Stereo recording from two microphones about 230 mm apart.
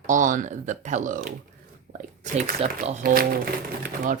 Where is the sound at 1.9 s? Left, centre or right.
Right.